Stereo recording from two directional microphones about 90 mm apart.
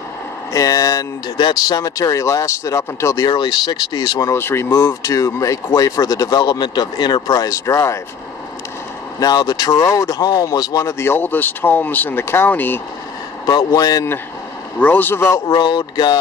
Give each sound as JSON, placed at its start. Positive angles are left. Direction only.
{"t": 0.5, "sound": "speech", "side_deg": 40}
{"t": 3.2, "sound": "speech", "side_deg": 50}
{"t": 4.3, "sound": "speech", "side_deg": 30}
{"t": 4.8, "sound": "speech", "side_deg": 40}
{"t": 9.2, "sound": "speech", "side_deg": 45}
{"t": 10.9, "sound": "speech", "side_deg": 25}
{"t": 13.5, "sound": "speech", "side_deg": 45}
{"t": 14.8, "sound": "speech", "side_deg": 20}
{"t": 15.5, "sound": "speech", "side_deg": 55}